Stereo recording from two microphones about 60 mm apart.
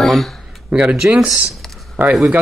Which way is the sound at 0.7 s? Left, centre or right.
Centre.